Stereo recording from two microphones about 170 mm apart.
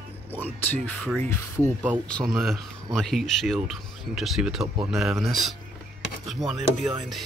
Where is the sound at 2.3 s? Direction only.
Centre (ahead or behind).